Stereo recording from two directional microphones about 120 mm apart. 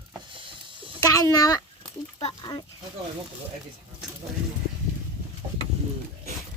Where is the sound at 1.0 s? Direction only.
30° left (ahead or behind).